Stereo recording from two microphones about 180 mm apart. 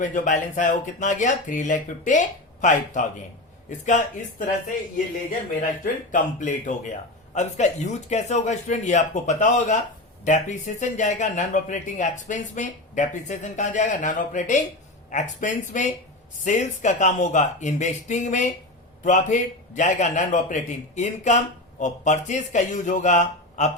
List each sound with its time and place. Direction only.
0.0 s a man's voice: 45° left (ahead or behind)
5.8 s a man's voice: 45° left (ahead or behind)